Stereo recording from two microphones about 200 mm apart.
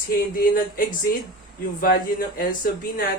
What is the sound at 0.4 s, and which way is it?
Speech, 45° left (ahead or behind).